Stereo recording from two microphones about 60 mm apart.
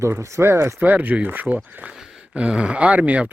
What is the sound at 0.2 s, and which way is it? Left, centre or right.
Speech, right.